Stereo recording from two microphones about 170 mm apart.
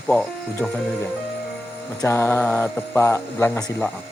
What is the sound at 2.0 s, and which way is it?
Speech, 15° left (ahead or behind).